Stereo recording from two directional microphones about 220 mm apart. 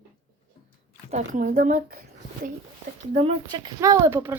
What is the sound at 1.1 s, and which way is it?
Speech, 35° right (ahead or behind).